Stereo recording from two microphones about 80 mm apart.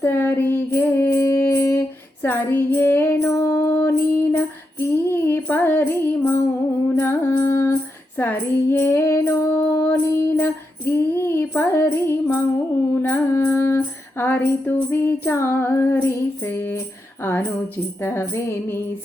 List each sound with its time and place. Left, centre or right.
0.0 s music: left
2.2 s female singing: left
3.2 s mantra: left
3.6 s female singing: left
6.9 s music: left
9.6 s a sound: left
12.9 s music: left
18.0 s music: left